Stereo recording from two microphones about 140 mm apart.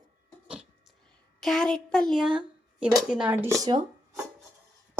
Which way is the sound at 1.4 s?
Centre (ahead or behind).